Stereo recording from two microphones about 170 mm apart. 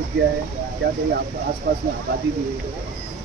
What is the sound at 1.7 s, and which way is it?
Speech, 70° right (ahead or behind).